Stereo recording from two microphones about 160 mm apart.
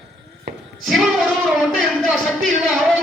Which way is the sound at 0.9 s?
Centre (ahead or behind).